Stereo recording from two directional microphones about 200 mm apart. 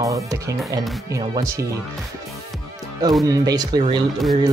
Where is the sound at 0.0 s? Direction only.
15° right (ahead or behind).